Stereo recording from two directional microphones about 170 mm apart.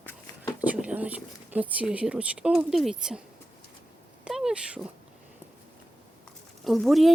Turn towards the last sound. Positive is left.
turn(degrees=0)  # may be behind; listen again after turning